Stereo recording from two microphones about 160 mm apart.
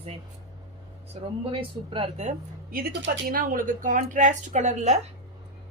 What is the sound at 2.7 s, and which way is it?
A woman's voice, 65° right (ahead or behind).